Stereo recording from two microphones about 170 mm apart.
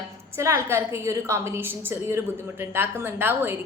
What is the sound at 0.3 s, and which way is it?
A woman's voice, 15° right (ahead or behind).